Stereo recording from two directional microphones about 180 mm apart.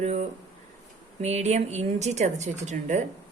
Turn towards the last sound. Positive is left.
turn(degrees=-40)  # may be behind; listen again after turning